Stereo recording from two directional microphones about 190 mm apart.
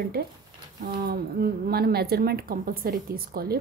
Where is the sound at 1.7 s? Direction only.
55° right (ahead or behind).